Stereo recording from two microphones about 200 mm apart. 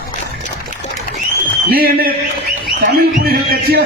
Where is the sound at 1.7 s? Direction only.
50° right (ahead or behind).